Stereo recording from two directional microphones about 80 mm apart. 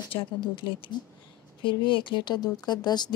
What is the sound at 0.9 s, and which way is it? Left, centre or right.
Speech, left.